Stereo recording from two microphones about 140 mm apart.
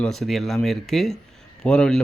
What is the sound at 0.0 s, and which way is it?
A man's voice, 5° left (ahead or behind).